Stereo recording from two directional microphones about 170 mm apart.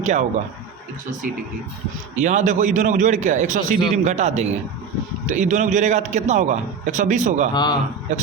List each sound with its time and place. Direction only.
0.0 s speech: 45° right (ahead or behind)
2.1 s a man's voice: 45° right (ahead or behind)
7.5 s a man's voice: 25° left (ahead or behind)